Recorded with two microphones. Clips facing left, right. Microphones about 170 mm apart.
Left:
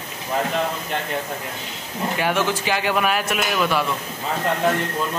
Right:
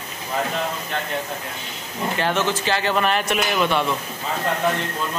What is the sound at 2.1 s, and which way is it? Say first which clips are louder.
Speech: even; 10° left (ahead or behind).